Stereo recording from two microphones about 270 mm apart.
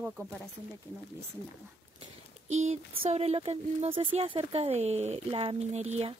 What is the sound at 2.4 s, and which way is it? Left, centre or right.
Speech, right.